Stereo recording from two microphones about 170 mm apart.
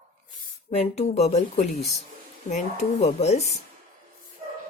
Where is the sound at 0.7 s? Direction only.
40° left (ahead or behind).